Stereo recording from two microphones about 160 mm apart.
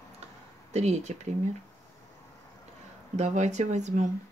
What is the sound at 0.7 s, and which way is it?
Speech, 45° right (ahead or behind).